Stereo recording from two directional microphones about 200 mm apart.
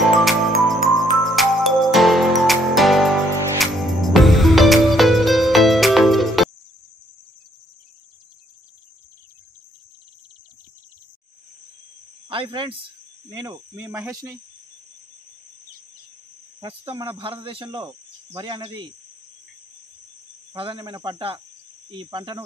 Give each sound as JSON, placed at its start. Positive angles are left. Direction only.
{"t": 0.2, "sound": "music", "side_deg": 0}
{"t": 12.3, "sound": "speech", "side_deg": -25}
{"t": 16.6, "sound": "speech", "side_deg": -25}
{"t": 17.8, "sound": "cricket", "side_deg": -20}
{"t": 20.5, "sound": "speech", "side_deg": -25}